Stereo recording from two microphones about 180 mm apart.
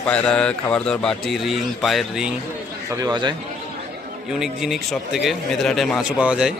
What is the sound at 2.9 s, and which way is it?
Speech, 20° right (ahead or behind).